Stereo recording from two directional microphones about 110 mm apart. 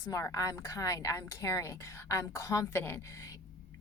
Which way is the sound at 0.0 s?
30° left (ahead or behind).